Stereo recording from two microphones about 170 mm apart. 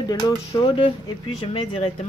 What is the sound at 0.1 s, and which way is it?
Speech, 25° left (ahead or behind).